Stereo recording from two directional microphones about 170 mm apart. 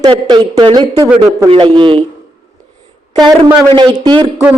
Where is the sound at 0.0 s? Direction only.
25° right (ahead or behind).